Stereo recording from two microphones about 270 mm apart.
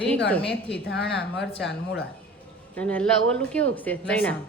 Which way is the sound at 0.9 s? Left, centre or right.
Left.